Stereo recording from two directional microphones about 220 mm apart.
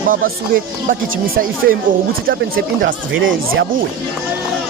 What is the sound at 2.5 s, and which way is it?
Speech, 55° right (ahead or behind).